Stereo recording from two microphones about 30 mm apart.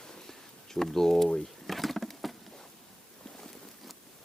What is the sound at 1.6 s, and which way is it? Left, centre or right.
Insect, centre.